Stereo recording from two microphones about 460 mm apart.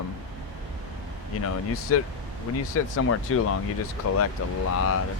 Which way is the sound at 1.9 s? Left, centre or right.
Left.